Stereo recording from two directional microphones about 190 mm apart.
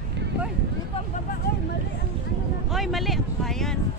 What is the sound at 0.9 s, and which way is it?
Vehicle, 30° left (ahead or behind).